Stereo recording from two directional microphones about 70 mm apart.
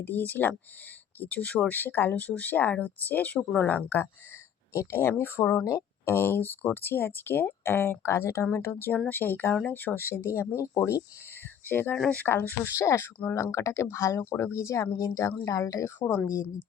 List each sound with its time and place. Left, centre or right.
0.0 s speech: left
4.7 s speech: left
11.7 s speech: left
15.8 s speech: left
16.2 s speech: left